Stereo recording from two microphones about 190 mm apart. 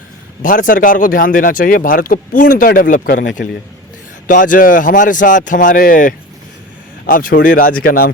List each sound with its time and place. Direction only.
0.4 s speech: 45° left (ahead or behind)